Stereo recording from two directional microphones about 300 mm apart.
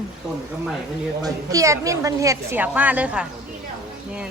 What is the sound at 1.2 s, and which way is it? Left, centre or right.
A woman's voice, centre.